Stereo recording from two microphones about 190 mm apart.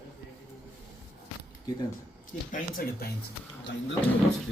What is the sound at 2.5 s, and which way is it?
Speech, 45° left (ahead or behind).